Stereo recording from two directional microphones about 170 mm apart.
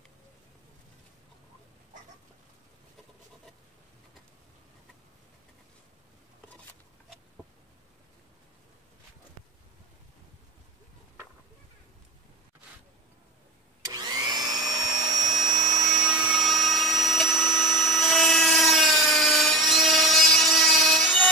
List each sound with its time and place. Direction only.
13.9 s vacuum cleaner: 25° right (ahead or behind)
16.1 s helicopter: 5° right (ahead or behind)
16.6 s a sound: centre (ahead or behind)